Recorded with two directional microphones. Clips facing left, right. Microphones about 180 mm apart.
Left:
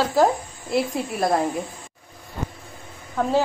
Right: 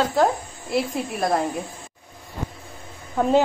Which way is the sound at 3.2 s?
20° right (ahead or behind).